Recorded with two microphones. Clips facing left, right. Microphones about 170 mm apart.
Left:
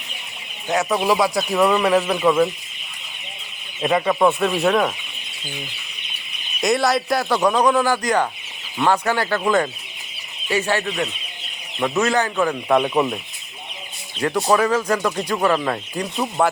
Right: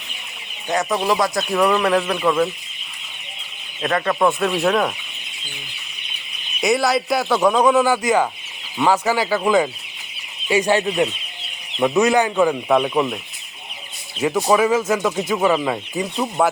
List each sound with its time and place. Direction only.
0.7 s speech: 5° left (ahead or behind)
3.8 s speech: 10° left (ahead or behind)
6.6 s speech: centre (ahead or behind)
14.2 s speech: 5° right (ahead or behind)